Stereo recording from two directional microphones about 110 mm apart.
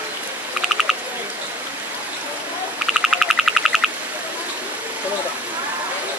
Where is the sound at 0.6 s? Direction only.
5° right (ahead or behind).